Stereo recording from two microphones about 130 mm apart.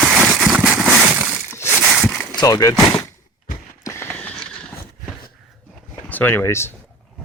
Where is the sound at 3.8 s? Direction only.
20° left (ahead or behind).